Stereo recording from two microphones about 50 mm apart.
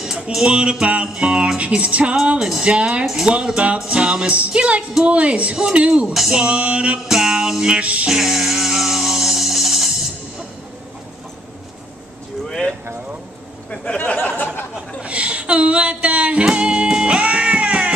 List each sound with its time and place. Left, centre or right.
0.0 s music: centre
0.5 s music: right
2.3 s music: centre
7.1 s music: centre; by 8.1 s right
8.1 s music: centre
12.4 s a sound: centre
13.7 s a sound: left
15.0 s music: right